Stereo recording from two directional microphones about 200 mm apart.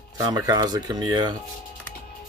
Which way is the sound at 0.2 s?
20° right (ahead or behind).